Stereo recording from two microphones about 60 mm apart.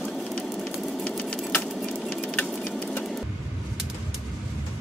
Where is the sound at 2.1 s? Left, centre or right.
Left.